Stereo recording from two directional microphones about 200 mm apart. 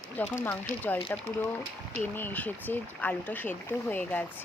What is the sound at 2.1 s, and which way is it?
Speech, 10° left (ahead or behind).